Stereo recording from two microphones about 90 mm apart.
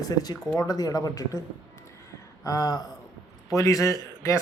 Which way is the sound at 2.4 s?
40° left (ahead or behind).